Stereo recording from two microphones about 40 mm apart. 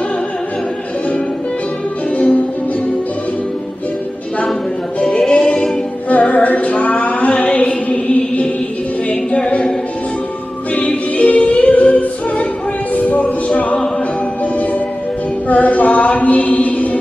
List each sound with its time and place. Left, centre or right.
5.3 s music: left
6.3 s a sound: left
9.1 s music: left
10.7 s choir: left
12.9 s music: left
15.4 s a sound: left